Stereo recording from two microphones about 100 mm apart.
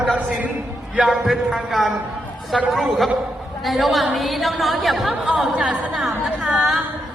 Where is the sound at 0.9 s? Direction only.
5° right (ahead or behind).